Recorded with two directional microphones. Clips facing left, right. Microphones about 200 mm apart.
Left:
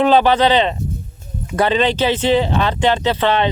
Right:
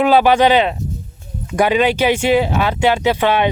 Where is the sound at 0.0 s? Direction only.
10° right (ahead or behind).